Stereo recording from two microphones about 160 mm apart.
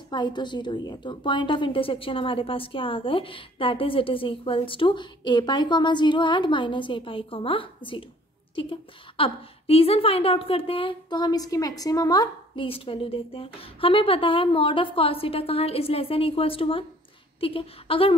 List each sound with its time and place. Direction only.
0.1 s a woman's voice: 30° left (ahead or behind)
12.6 s a woman's voice: 35° left (ahead or behind)